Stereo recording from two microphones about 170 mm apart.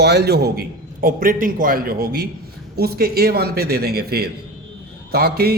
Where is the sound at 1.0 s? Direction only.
55° right (ahead or behind).